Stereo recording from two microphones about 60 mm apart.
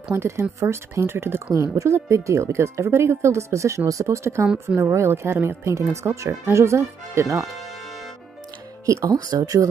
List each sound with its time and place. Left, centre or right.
0.1 s speech: right
1.5 s speech: right
8.8 s speech: right